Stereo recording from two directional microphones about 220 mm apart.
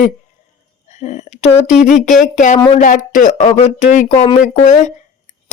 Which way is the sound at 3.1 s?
35° left (ahead or behind).